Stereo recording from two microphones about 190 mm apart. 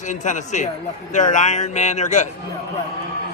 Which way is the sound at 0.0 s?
40° left (ahead or behind).